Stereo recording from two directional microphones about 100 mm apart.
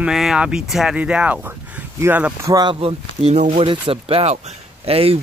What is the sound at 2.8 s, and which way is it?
Speech, 85° right.